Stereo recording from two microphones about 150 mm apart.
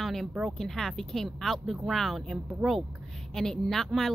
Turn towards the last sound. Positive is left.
turn(degrees=0)  # may be behind; listen again after turning